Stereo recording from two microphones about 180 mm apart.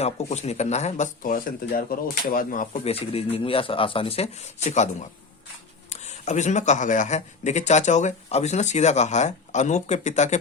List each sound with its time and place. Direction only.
0.0 s speech: 35° left (ahead or behind)